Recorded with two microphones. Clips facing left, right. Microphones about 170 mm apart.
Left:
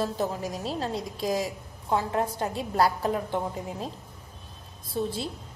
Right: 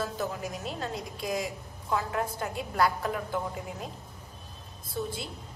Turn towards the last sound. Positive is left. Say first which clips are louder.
# left 4 dB
turn(degrees=30)  # may be behind; listen again after turning